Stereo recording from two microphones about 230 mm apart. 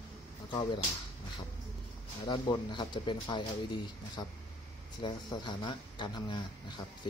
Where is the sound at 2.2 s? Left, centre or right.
Centre.